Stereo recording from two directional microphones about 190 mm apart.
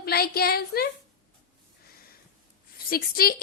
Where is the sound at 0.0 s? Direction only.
55° left (ahead or behind).